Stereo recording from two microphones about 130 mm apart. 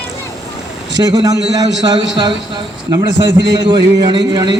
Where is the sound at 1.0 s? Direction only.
30° right (ahead or behind).